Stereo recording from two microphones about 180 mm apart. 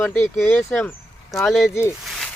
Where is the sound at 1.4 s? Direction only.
Centre (ahead or behind).